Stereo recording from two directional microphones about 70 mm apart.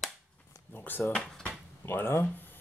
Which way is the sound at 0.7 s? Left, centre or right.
Left.